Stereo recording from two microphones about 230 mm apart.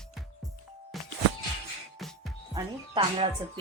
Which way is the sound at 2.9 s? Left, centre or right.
Right.